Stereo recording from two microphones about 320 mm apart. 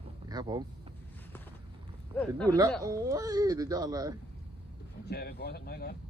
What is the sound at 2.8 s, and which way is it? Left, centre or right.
Speech, centre.